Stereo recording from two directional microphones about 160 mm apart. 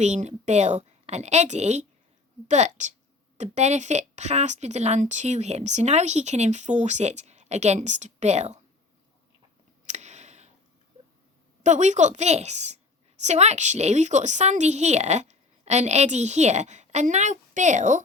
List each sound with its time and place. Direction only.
0.0 s a woman's voice: 45° right (ahead or behind)
9.8 s a sound: 45° right (ahead or behind)
11.6 s a woman's voice: 50° right (ahead or behind)